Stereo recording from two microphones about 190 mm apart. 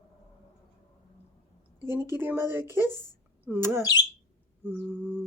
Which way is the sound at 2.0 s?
10° right (ahead or behind).